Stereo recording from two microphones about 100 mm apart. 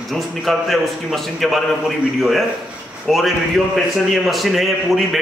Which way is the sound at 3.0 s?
Centre (ahead or behind).